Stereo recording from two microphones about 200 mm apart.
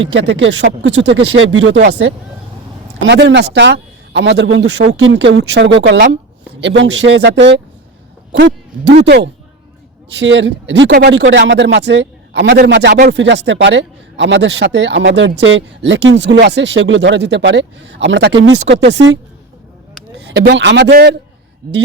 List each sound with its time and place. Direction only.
0.0 s speech: 65° right (ahead or behind)
3.0 s speech: 65° right (ahead or behind)
20.2 s speech: 60° right (ahead or behind)